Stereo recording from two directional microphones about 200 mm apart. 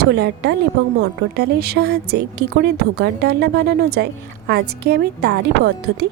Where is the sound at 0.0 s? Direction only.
55° right (ahead or behind).